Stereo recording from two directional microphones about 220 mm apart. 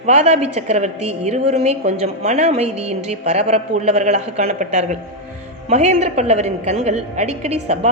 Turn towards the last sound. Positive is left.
turn(degrees=-30)  # may be behind; listen again after turning